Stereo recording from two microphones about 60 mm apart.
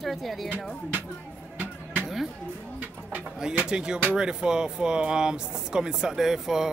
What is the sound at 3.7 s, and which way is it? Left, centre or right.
Speech, centre.